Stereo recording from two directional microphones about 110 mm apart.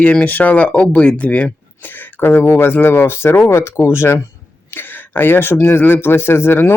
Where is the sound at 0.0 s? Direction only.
10° left (ahead or behind).